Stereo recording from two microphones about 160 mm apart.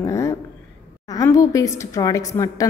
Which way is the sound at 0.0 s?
20° left (ahead or behind).